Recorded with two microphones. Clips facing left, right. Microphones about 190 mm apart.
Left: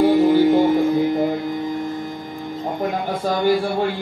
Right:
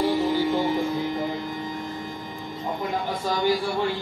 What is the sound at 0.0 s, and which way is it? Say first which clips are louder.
Music: left 9 dB; 55° left (ahead or behind).